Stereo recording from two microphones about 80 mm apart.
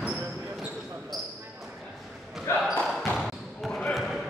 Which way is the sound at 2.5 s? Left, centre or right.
Left.